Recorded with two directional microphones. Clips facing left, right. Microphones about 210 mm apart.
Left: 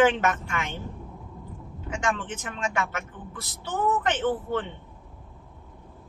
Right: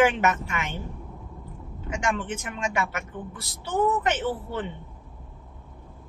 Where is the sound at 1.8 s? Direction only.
10° right (ahead or behind).